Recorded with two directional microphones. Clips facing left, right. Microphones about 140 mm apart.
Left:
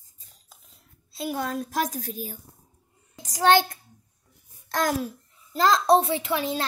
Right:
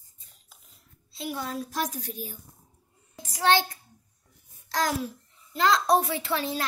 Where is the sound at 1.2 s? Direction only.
50° left (ahead or behind).